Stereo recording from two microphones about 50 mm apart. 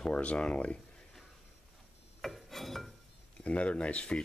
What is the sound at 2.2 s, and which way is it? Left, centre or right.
Filing, centre.